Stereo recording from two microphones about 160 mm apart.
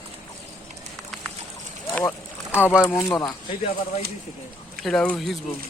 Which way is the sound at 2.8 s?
20° left (ahead or behind).